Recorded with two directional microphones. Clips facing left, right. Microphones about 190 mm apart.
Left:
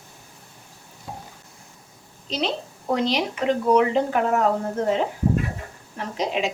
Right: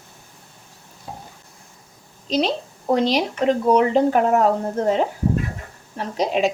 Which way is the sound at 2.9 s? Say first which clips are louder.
Right 4 dB; 35° right (ahead or behind).